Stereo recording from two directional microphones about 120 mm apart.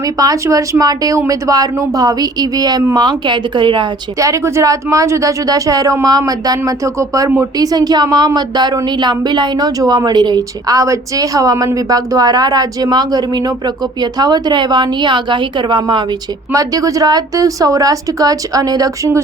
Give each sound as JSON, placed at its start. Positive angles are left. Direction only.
{"t": 0.0, "sound": "a woman's voice", "side_deg": -30}
{"t": 4.2, "sound": "a woman's voice", "side_deg": -25}
{"t": 16.5, "sound": "a woman's voice", "side_deg": -30}